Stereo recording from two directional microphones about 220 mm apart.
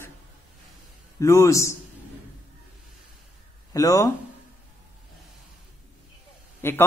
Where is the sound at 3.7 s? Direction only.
15° left (ahead or behind).